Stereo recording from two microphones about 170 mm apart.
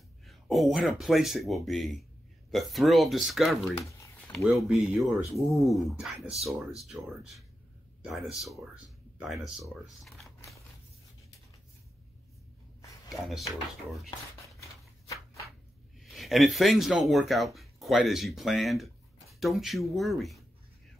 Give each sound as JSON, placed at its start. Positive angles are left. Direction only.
{"t": 0.3, "sound": "speech", "side_deg": 0}
{"t": 13.1, "sound": "speech", "side_deg": 0}
{"t": 14.6, "sound": "a sound", "side_deg": 20}
{"t": 16.0, "sound": "speech", "side_deg": 0}